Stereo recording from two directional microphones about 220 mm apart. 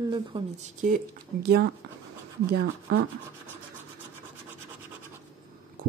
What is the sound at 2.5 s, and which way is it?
Speech, 55° right (ahead or behind).